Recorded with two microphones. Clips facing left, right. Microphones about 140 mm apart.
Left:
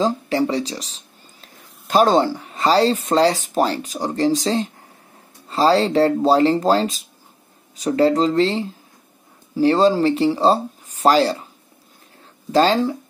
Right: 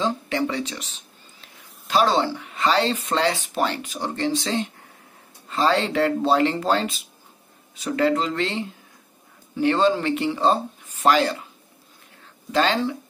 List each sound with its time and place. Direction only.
0.0 s speech: 35° left (ahead or behind)
1.4 s speech: 45° left (ahead or behind)
12.4 s speech: 35° left (ahead or behind)